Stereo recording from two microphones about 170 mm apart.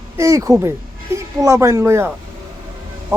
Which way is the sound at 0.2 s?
20° right (ahead or behind).